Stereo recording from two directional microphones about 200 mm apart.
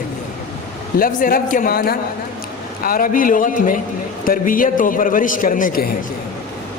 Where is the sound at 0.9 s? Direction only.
45° left (ahead or behind).